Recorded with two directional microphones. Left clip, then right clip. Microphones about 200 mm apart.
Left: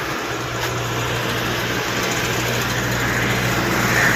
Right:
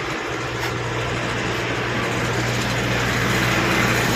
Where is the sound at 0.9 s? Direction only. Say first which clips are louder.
Left 2 dB; 60° left (ahead or behind).